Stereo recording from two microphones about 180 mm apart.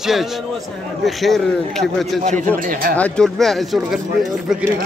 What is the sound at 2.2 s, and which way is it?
Speech, 45° right (ahead or behind).